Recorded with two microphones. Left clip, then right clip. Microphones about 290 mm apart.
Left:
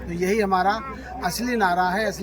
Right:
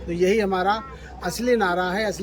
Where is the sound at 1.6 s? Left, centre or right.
Centre.